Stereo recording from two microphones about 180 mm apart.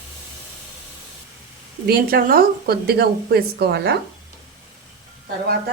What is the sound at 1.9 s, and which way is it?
A woman's voice, 55° right (ahead or behind).